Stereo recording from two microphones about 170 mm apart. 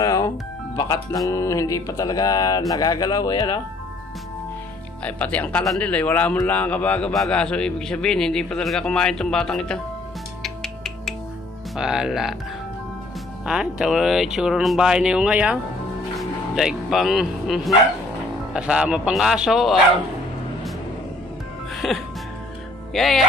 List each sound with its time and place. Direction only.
0.0 s music: 20° left (ahead or behind)
5.0 s a man's voice: 10° left (ahead or behind)
10.4 s music: centre (ahead or behind)
11.7 s a man's voice: 5° right (ahead or behind)
13.5 s a man's voice: 5° right (ahead or behind)
21.8 s a man's voice: centre (ahead or behind)